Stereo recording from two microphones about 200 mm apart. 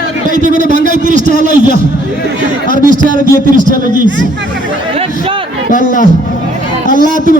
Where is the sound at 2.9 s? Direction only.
40° right (ahead or behind).